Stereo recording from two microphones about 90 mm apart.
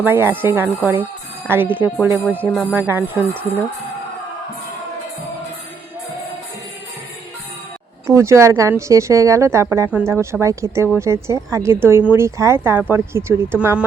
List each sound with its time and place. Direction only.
0.0 s speech: 25° right (ahead or behind)
8.0 s speech: 30° right (ahead or behind)